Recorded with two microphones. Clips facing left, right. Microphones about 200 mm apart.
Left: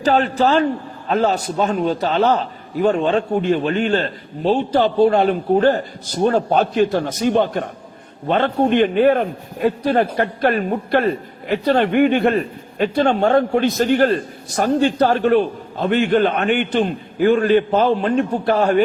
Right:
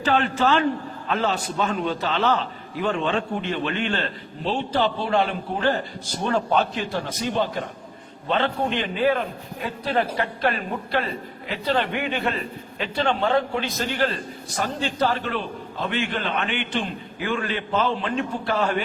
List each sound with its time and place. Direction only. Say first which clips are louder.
0.0 s a man's voice: left 5 dB; 40° left (ahead or behind)